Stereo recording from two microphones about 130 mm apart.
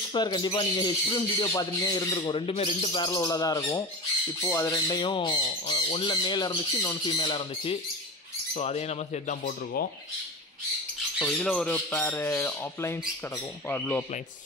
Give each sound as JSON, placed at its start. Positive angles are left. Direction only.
{"t": 0.1, "sound": "speech", "side_deg": 35}
{"t": 2.9, "sound": "speech", "side_deg": 35}
{"t": 8.5, "sound": "speech", "side_deg": 55}
{"t": 11.1, "sound": "speech", "side_deg": 5}
{"t": 11.9, "sound": "speech", "side_deg": 15}